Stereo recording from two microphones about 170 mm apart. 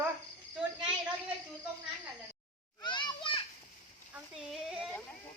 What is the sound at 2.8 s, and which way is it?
Children playing, 25° left (ahead or behind).